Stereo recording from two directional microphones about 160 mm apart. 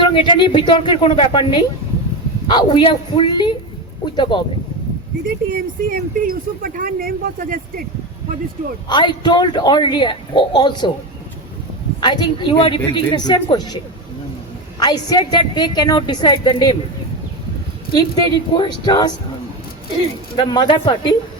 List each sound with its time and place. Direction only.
0.0 s a man's voice: 30° left (ahead or behind)
5.2 s speech: 65° right (ahead or behind)
8.9 s a man's voice: 30° left (ahead or behind)
11.9 s a man's voice: 25° left (ahead or behind)
14.8 s a man's voice: 25° left (ahead or behind)
17.9 s a man's voice: 30° left (ahead or behind)
20.3 s a man's voice: 30° left (ahead or behind)